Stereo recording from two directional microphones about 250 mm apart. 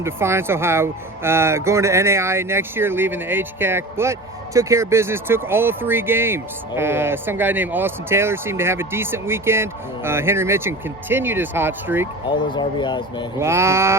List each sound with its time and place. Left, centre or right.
0.0 s speech: centre
12.3 s speech: centre
13.4 s speech: centre